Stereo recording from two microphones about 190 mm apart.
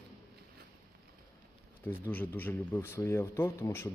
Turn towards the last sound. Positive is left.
turn(degrees=15)  # may be behind; listen again after turning